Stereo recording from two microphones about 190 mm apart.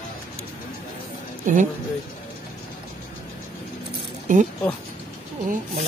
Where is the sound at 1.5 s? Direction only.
40° right (ahead or behind).